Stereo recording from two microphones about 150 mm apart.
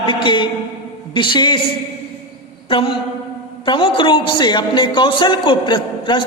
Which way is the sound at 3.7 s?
35° left (ahead or behind).